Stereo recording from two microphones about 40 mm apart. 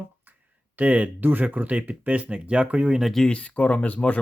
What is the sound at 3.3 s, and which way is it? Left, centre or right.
Speech, left.